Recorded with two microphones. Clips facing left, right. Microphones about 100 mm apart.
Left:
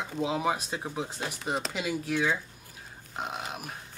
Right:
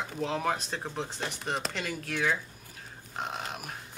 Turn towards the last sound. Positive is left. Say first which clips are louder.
# even
turn(degrees=0)  # may be behind; listen again after turning